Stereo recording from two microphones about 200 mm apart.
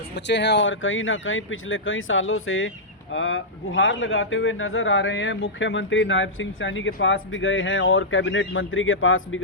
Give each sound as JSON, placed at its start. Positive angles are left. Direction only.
{"t": 0.3, "sound": "speech", "side_deg": 60}